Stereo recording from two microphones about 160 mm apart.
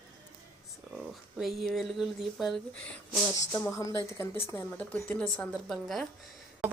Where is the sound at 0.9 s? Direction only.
Centre (ahead or behind).